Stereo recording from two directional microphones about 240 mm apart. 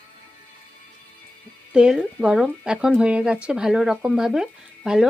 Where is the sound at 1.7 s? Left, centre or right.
Centre.